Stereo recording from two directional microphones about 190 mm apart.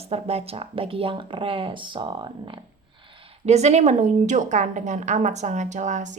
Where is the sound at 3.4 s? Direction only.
35° right (ahead or behind).